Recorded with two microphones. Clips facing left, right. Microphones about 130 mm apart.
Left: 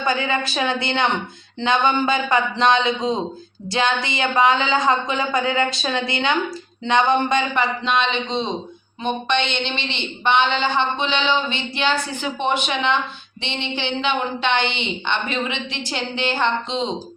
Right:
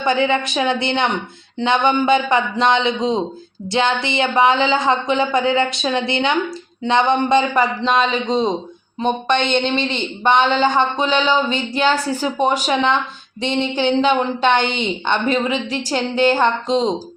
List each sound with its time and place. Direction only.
0.0 s a man's voice: 25° right (ahead or behind); by 16.9 s 40° right (ahead or behind)